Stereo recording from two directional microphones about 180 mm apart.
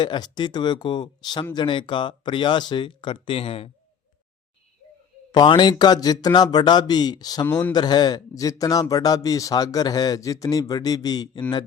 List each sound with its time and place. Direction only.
0.0 s a man's voice: 25° left (ahead or behind)
5.3 s a man's voice: 25° left (ahead or behind)